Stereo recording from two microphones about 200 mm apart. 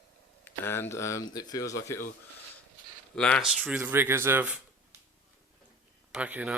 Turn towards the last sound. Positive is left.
turn(degrees=-5)  # may be behind; listen again after turning